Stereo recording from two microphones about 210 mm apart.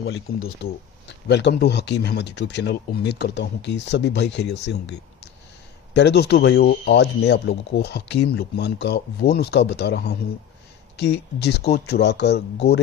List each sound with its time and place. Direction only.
0.1 s speech: 65° left (ahead or behind)